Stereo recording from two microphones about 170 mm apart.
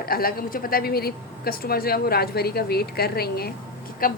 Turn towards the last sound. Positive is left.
turn(degrees=55)  # may be behind; listen again after turning